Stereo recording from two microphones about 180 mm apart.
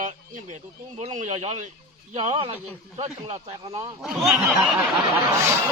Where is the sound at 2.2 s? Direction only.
25° right (ahead or behind).